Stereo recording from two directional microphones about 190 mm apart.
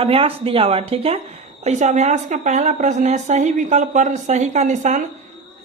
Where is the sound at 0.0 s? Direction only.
30° right (ahead or behind).